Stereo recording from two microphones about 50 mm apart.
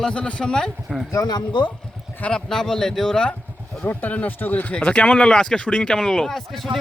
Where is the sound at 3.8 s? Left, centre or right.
Left.